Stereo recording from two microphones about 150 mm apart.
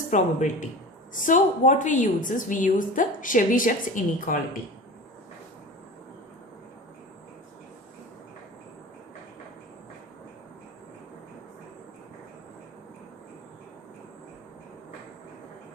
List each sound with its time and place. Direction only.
0.1 s a woman's voice: 55° left (ahead or behind)